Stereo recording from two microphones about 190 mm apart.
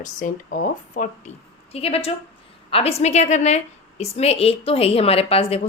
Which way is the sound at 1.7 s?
30° left (ahead or behind).